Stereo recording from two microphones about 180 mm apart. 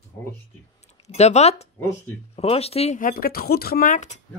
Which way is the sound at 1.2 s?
35° left (ahead or behind).